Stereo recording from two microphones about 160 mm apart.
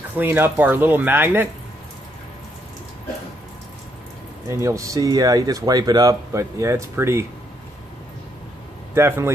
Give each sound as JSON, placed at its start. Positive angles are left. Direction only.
{"t": 0.2, "sound": "speech", "side_deg": -10}
{"t": 4.5, "sound": "speech", "side_deg": -20}
{"t": 8.9, "sound": "speech", "side_deg": -15}